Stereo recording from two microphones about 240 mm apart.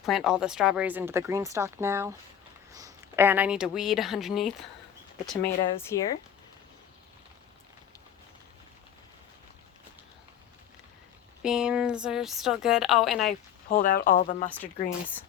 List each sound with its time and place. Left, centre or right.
0.0 s a woman's voice: centre
5.9 s speech: centre
11.4 s a woman's voice: centre
13.7 s speech: left